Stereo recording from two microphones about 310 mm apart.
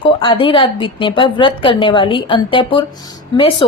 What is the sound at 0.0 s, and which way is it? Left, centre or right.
A woman's voice, centre.